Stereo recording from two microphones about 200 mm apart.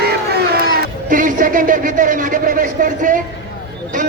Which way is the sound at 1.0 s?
40° right (ahead or behind).